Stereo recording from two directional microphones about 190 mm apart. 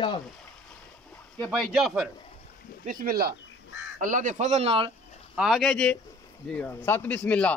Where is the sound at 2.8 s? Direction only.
45° right (ahead or behind).